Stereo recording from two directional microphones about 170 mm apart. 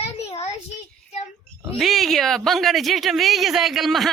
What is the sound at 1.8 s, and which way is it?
A man's voice, centre (ahead or behind).